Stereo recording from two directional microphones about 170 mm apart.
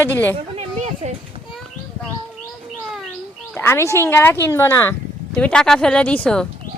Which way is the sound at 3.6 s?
15° left (ahead or behind).